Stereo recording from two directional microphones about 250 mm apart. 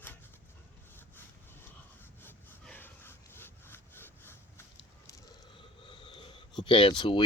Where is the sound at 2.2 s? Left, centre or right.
Centre.